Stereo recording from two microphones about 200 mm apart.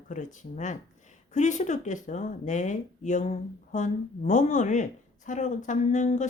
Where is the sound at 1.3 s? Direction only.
35° left (ahead or behind).